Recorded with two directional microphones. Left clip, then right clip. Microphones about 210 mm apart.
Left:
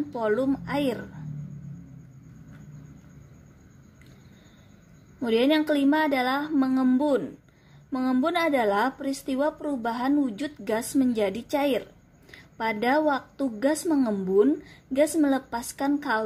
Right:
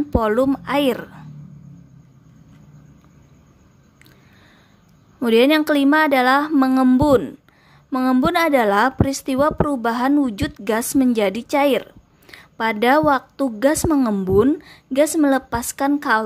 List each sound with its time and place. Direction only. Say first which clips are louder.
0.1 s a woman's voice: right 8 dB; 30° right (ahead or behind)
5.2 s a woman's voice: right 8 dB; 30° right (ahead or behind)